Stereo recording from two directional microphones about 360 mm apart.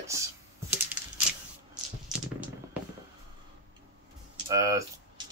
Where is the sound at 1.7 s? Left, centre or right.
Centre.